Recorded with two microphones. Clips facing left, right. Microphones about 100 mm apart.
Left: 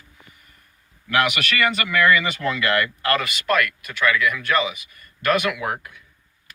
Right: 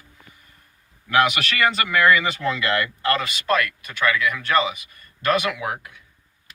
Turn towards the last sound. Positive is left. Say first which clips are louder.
# left 1 dB
turn(degrees=-30)  # may be behind; listen again after turning